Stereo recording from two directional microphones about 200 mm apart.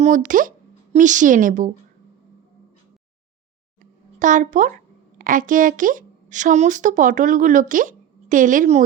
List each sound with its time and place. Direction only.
0.3 s a woman's voice: 40° right (ahead or behind)
4.2 s a woman's voice: 40° right (ahead or behind)